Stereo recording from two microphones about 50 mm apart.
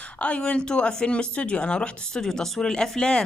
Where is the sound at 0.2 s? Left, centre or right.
Left.